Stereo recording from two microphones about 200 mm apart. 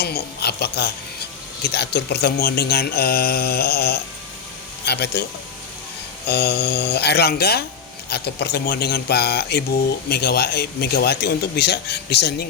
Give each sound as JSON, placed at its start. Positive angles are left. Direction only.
{"t": 0.0, "sound": "a man's voice", "side_deg": 55}
{"t": 6.2, "sound": "a man's voice", "side_deg": 55}